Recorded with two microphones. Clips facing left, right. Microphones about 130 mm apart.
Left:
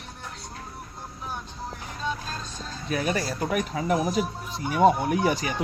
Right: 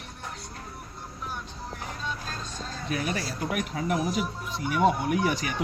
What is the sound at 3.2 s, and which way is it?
Speech, 45° left (ahead or behind).